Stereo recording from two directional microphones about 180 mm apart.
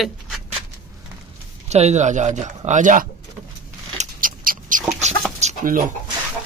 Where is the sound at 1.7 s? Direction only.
40° right (ahead or behind).